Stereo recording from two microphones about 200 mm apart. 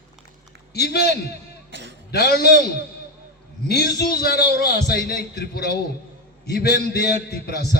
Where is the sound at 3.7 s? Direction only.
55° left (ahead or behind).